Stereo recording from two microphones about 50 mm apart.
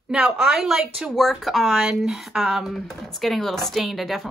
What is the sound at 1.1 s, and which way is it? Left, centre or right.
Speech, centre.